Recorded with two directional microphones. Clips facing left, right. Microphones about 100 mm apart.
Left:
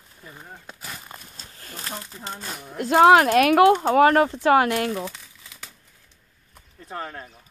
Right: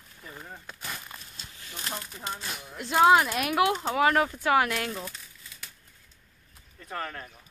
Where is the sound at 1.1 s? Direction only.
40° left (ahead or behind).